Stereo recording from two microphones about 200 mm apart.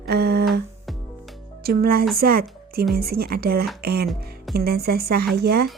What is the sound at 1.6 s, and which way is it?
Speech, 50° right (ahead or behind).